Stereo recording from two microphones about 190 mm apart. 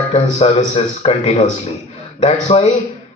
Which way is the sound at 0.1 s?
35° left (ahead or behind).